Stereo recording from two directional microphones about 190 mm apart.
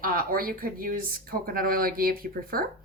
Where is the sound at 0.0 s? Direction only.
50° right (ahead or behind).